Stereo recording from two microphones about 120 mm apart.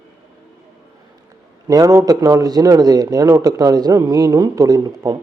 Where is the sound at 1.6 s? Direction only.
30° right (ahead or behind).